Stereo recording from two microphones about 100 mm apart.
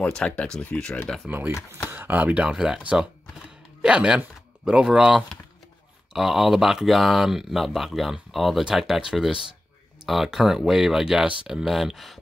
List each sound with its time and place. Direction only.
0.0 s speech: 10° left (ahead or behind)
1.2 s speech: 20° right (ahead or behind); by 12.2 s centre (ahead or behind)